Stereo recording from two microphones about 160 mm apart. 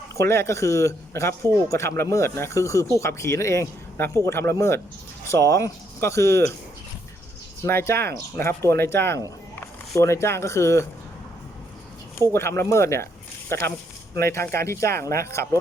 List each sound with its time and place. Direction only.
0.2 s speech: 15° left (ahead or behind)
7.6 s speech: 15° left (ahead or behind)
12.3 s speech: 15° left (ahead or behind)